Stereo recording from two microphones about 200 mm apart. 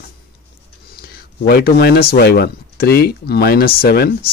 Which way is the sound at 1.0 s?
50° left (ahead or behind).